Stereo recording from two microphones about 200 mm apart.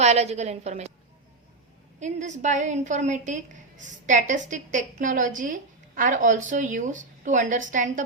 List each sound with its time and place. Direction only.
0.0 s a woman's voice: 35° right (ahead or behind)
2.0 s a woman's voice: 35° right (ahead or behind)